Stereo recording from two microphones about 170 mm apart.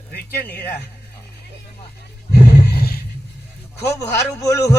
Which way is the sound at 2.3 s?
70° left (ahead or behind).